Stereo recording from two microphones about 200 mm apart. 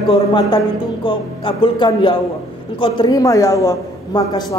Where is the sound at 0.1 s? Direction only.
20° left (ahead or behind).